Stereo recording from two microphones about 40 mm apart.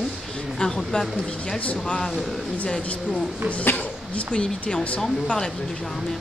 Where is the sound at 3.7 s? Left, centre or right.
Left.